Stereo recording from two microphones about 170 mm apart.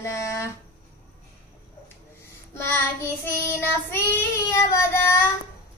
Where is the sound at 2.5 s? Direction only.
15° left (ahead or behind).